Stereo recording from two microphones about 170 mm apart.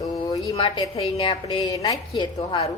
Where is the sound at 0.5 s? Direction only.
30° left (ahead or behind).